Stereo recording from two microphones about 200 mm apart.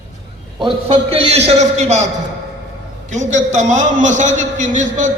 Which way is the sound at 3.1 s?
35° right (ahead or behind).